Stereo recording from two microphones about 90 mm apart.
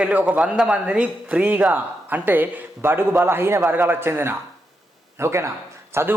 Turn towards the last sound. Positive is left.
turn(degrees=-30)  # may be behind; listen again after turning